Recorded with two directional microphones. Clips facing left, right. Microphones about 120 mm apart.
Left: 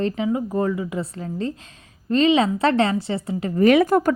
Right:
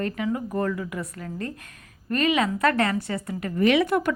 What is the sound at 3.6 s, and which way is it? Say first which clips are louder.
Speech: left 5 dB; 45° left (ahead or behind).